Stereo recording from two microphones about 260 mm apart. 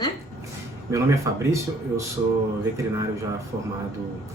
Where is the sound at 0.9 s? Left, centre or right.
Centre.